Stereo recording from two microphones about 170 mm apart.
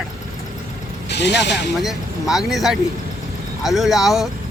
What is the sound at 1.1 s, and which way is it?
Speech, 90° left.